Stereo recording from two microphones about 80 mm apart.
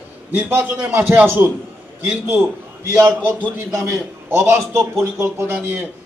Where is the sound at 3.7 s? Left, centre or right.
Right.